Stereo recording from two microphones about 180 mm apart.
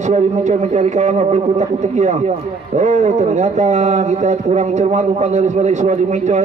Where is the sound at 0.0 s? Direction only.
40° right (ahead or behind).